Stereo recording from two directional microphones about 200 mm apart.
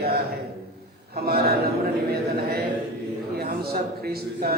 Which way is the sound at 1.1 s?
50° right (ahead or behind).